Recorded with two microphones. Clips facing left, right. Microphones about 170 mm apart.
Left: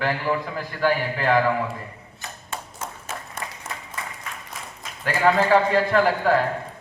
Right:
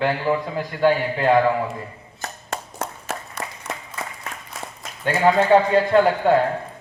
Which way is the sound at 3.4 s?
50° left (ahead or behind).